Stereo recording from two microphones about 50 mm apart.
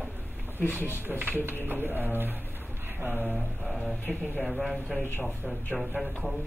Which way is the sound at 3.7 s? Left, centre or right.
Centre.